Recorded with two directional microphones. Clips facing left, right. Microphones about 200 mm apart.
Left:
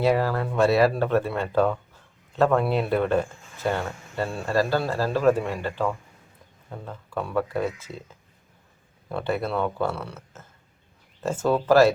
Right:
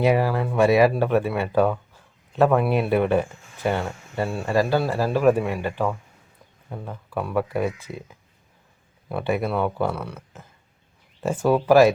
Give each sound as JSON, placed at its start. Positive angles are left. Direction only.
{"t": 0.0, "sound": "speech", "side_deg": -15}
{"t": 10.0, "sound": "speech", "side_deg": 0}
{"t": 11.2, "sound": "speech", "side_deg": -15}